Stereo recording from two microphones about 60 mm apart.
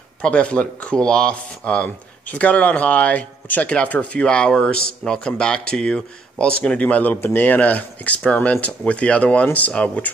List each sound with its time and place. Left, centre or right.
0.2 s speech: centre